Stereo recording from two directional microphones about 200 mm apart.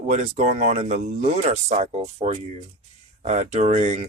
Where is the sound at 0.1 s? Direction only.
35° right (ahead or behind).